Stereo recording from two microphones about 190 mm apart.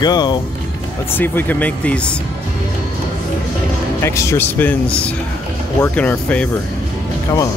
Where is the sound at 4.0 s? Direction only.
15° left (ahead or behind).